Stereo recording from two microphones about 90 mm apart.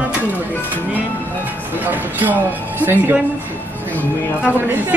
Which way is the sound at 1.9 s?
20° right (ahead or behind).